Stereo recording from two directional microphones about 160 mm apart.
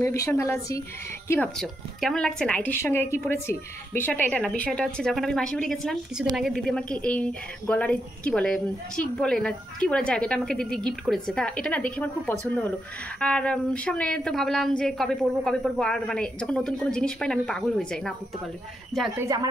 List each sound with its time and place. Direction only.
0.0 s a woman's voice: 20° left (ahead or behind)
1.6 s a woman's voice: 5° left (ahead or behind)
19.1 s speech: 20° right (ahead or behind)